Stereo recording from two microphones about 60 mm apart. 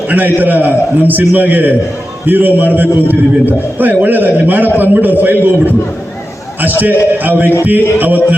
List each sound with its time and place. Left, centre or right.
0.1 s a man's voice: right
7.2 s a man's voice: right